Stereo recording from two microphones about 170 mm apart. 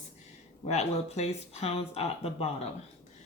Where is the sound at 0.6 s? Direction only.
40° left (ahead or behind).